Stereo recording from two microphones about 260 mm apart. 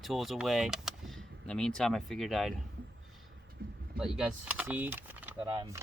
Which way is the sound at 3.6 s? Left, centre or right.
Right.